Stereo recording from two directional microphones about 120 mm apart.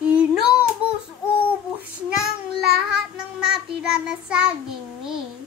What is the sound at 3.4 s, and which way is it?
Child singing, 5° right (ahead or behind).